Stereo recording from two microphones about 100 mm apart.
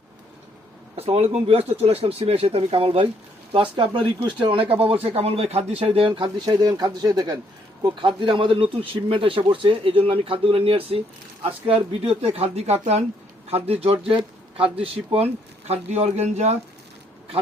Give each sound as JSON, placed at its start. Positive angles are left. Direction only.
{"t": 0.9, "sound": "speech", "side_deg": -85}
{"t": 1.8, "sound": "speech", "side_deg": -70}
{"t": 3.5, "sound": "speech", "side_deg": -55}
{"t": 4.7, "sound": "speech", "side_deg": -65}
{"t": 5.0, "sound": "speech", "side_deg": -85}
{"t": 6.1, "sound": "speech", "side_deg": -50}
{"t": 8.0, "sound": "speech", "side_deg": -55}
{"t": 14.5, "sound": "speech", "side_deg": -70}